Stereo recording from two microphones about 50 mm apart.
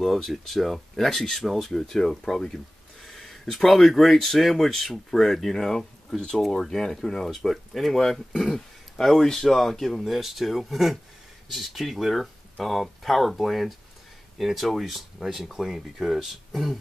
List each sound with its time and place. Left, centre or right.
0.0 s speech: centre